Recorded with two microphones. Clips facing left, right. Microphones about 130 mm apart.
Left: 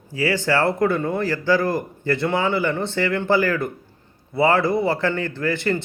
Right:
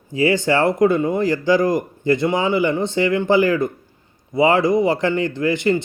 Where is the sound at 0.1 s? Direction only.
20° right (ahead or behind).